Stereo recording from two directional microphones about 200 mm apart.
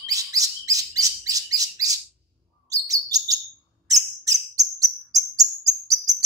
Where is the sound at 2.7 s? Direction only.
15° right (ahead or behind).